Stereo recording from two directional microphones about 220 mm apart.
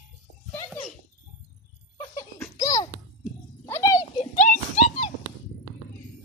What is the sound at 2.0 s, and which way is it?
Laughter, 15° left (ahead or behind).